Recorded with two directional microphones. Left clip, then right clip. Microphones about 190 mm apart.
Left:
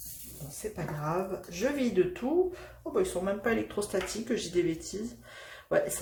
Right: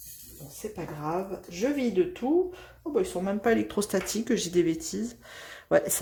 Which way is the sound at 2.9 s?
30° right (ahead or behind).